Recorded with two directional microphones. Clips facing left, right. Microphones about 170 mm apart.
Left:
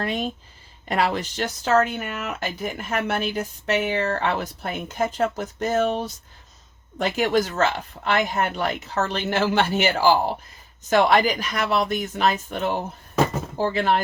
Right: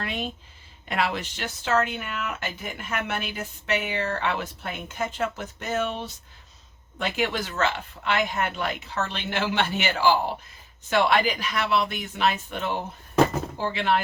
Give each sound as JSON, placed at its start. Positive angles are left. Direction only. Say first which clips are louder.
{"t": 0.0, "sound": "speech", "louder": "left 5 dB", "side_deg": 40}